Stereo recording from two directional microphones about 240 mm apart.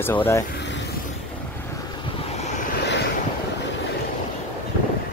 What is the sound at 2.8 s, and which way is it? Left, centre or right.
Vehicle, left.